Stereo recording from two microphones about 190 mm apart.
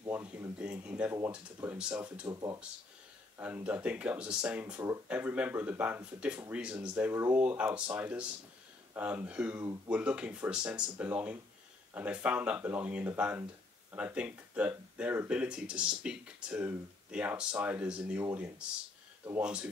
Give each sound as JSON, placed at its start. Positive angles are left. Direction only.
{"t": 0.0, "sound": "a sound", "side_deg": -10}
{"t": 1.1, "sound": "speech", "side_deg": -10}
{"t": 2.2, "sound": "speech", "side_deg": -20}
{"t": 3.3, "sound": "speech", "side_deg": -10}